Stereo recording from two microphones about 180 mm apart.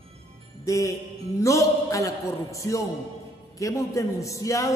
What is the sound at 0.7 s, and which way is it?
A man's voice, 20° left (ahead or behind).